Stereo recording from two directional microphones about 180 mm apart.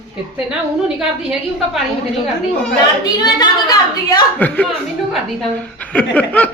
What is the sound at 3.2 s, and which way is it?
Speech, 25° left (ahead or behind).